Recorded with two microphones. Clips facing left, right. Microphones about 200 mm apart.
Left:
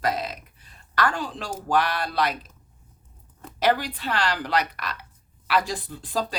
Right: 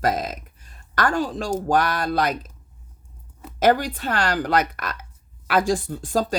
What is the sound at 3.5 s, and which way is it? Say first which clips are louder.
Speech: right 4 dB; 45° right (ahead or behind).